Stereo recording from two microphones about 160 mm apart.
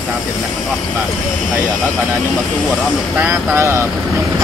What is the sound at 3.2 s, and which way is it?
Speech, 15° right (ahead or behind).